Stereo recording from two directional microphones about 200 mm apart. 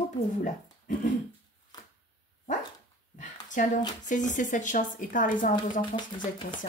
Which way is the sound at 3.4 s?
40° left (ahead or behind).